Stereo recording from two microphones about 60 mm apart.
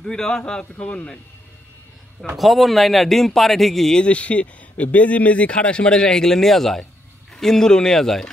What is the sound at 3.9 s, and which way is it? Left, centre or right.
Speech, left.